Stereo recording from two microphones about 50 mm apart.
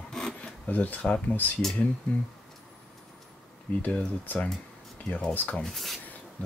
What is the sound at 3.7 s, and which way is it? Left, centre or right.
Speech, left.